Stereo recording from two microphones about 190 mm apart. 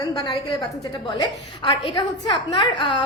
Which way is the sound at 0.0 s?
20° left (ahead or behind).